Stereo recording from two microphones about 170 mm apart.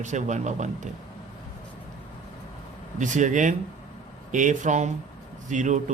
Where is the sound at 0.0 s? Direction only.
45° right (ahead or behind).